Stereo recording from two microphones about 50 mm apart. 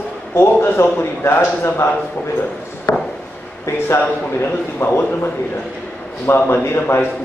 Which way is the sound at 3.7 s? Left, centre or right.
Left.